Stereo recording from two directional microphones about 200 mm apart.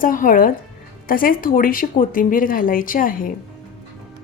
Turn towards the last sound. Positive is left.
turn(degrees=45)  # may be behind; listen again after turning